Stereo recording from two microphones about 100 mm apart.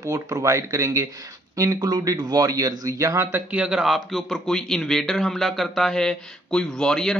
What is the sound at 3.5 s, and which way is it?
A man's voice, 10° right (ahead or behind).